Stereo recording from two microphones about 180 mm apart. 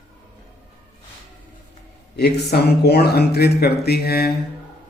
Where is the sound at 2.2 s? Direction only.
65° left (ahead or behind).